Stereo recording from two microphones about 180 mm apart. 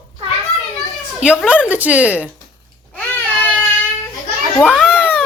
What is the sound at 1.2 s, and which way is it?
Speech, 5° right (ahead or behind).